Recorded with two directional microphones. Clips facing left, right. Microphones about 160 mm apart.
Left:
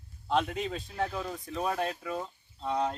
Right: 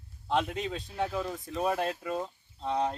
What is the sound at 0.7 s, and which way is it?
Speech, centre (ahead or behind).